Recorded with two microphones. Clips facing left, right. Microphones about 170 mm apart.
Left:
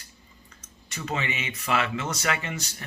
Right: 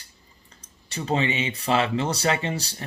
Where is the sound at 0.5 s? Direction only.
30° right (ahead or behind).